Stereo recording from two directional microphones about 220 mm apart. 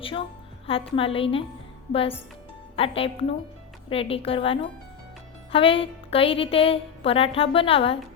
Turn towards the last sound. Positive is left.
turn(degrees=25)  # may be behind; listen again after turning